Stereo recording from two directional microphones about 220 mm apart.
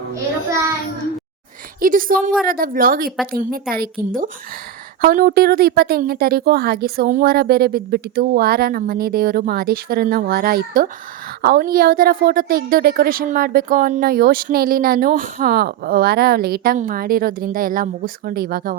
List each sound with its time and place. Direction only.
1.8 s a woman's voice: 40° right (ahead or behind)